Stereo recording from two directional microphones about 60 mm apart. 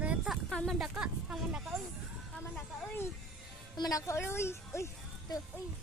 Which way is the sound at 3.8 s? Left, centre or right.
Left.